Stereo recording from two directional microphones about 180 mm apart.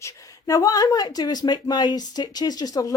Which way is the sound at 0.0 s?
20° left (ahead or behind).